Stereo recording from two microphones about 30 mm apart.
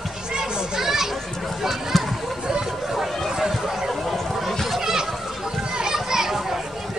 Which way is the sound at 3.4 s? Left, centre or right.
Centre.